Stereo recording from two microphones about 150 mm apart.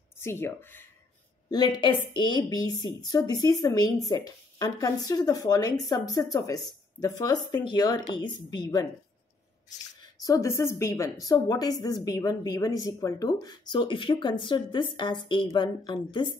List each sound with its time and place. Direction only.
0.2 s speech: 15° left (ahead or behind)
1.5 s a woman's voice: 30° left (ahead or behind)
10.2 s a woman's voice: 20° left (ahead or behind)